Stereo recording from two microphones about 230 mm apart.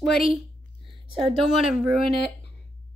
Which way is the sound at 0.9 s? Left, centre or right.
Right.